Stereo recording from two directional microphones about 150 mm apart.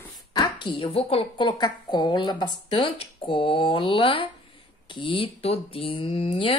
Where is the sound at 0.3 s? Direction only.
30° left (ahead or behind).